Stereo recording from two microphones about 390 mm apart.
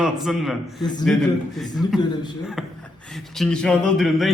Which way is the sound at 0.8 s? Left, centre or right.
Centre.